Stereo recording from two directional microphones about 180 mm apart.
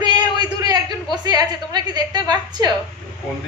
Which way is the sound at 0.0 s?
25° right (ahead or behind).